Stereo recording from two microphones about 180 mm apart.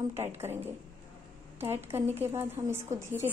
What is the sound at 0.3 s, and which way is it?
A woman's voice, 10° right (ahead or behind).